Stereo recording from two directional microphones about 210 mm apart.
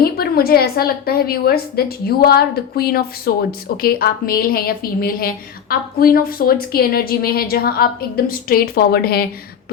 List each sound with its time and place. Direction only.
0.0 s a woman's voice: 45° left (ahead or behind)